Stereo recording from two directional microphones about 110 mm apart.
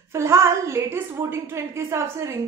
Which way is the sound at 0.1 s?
25° right (ahead or behind).